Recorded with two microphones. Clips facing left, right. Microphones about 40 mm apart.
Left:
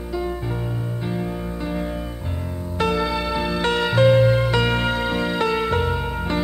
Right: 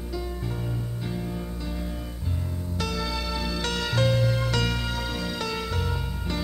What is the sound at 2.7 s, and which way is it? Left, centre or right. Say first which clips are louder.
Music: left 9 dB; left.